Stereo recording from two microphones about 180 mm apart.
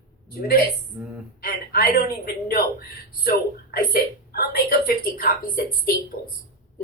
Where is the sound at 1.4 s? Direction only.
60° left (ahead or behind).